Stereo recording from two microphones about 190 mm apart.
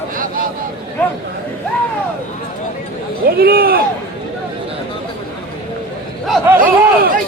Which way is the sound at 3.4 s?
50° right (ahead or behind).